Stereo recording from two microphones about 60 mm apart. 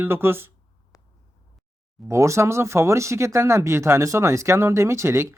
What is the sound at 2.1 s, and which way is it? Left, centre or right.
Speech, right.